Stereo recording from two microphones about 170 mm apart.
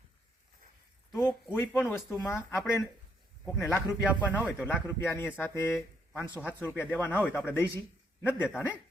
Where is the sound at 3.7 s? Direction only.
Centre (ahead or behind).